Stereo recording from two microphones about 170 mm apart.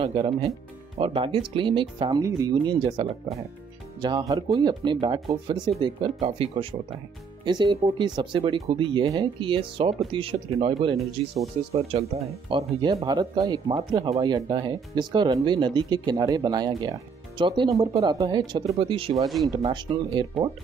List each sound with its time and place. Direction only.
0.0 s speech: 30° right (ahead or behind)
19.2 s speech: centre (ahead or behind)
19.5 s speech: 25° right (ahead or behind)